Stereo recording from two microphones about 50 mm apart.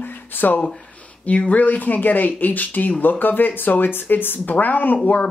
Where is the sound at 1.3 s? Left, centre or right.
Left.